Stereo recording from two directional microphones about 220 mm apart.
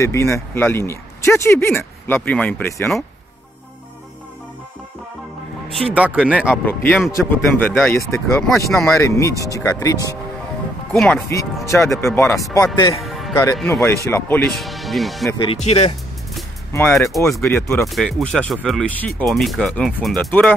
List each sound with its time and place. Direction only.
0.0 s speech: 15° left (ahead or behind)
5.7 s speech: centre (ahead or behind)
6.5 s speech: 5° left (ahead or behind)
10.9 s speech: 5° left (ahead or behind); by 13.0 s 20° left (ahead or behind)
13.0 s music: centre (ahead or behind)
13.3 s speech: 15° left (ahead or behind)
15.3 s speech: 25° left (ahead or behind)
16.7 s speech: 10° left (ahead or behind)